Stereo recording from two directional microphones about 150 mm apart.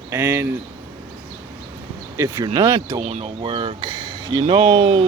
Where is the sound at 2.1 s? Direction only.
20° right (ahead or behind).